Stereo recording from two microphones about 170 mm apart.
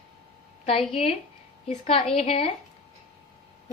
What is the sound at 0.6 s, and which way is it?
A woman's voice, 35° left (ahead or behind).